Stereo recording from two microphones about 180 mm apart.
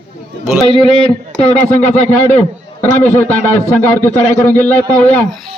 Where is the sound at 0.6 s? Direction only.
30° left (ahead or behind).